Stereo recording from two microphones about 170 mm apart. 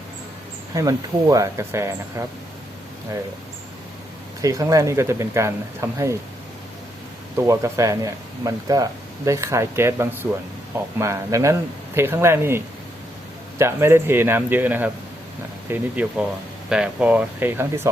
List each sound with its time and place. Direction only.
0.7 s speech: 20° right (ahead or behind)
4.4 s speech: 20° right (ahead or behind)
7.3 s speech: 15° right (ahead or behind)